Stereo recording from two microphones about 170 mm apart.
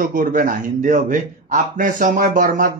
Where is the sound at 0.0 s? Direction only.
55° right (ahead or behind).